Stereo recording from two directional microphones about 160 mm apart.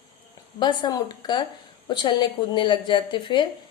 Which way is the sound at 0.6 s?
25° left (ahead or behind).